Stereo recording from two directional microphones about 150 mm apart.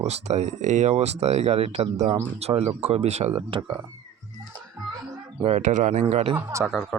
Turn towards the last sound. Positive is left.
turn(degrees=-5)  # may be behind; listen again after turning